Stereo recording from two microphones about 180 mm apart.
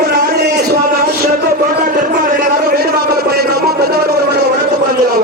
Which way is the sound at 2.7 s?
60° right (ahead or behind).